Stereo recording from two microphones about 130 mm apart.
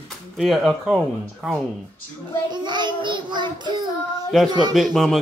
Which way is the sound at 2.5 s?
35° right (ahead or behind).